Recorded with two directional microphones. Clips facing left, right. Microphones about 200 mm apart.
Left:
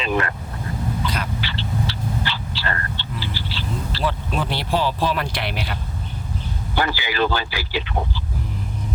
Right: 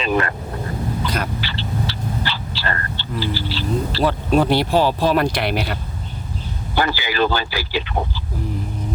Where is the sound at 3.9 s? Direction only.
45° right (ahead or behind).